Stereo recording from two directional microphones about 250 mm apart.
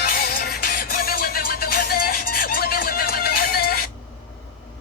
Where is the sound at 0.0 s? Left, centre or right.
Left.